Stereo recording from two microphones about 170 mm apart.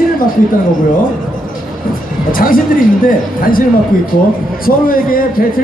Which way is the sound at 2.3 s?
55° left (ahead or behind).